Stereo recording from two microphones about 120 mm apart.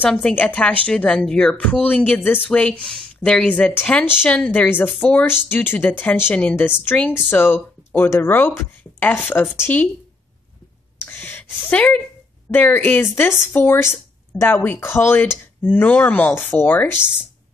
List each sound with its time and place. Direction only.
0.0 s speech: 10° left (ahead or behind)
11.1 s a sound: 15° left (ahead or behind)
12.4 s speech: 15° left (ahead or behind)